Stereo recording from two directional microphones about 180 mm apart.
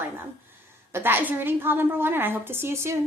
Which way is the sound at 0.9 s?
10° right (ahead or behind).